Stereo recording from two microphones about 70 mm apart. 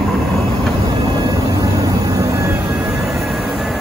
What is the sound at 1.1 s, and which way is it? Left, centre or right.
Vehicle, right.